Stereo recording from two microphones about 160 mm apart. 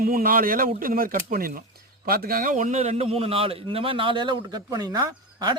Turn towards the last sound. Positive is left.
turn(degrees=-25)  # may be behind; listen again after turning